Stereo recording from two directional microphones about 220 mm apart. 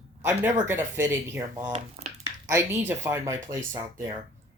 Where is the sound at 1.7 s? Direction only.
30° right (ahead or behind).